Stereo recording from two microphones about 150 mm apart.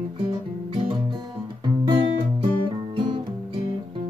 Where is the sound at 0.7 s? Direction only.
35° right (ahead or behind).